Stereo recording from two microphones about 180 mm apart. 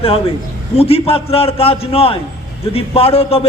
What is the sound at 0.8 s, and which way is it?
A man's voice, 35° left (ahead or behind).